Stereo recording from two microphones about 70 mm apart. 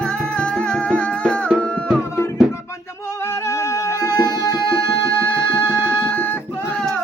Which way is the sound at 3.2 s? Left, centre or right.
Left.